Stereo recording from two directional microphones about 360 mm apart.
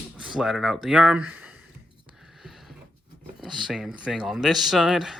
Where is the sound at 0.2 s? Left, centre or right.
Centre.